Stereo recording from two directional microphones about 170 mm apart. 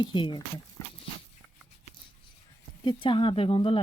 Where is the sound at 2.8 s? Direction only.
30° left (ahead or behind).